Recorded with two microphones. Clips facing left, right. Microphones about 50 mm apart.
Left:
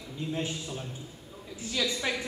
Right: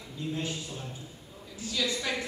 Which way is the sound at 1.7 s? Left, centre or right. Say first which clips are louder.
Left 1 dB; left.